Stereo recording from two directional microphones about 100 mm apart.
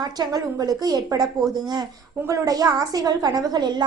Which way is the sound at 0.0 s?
40° right (ahead or behind).